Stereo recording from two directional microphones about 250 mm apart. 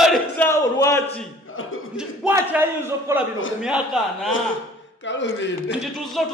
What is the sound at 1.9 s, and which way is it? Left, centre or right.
A man's voice, centre.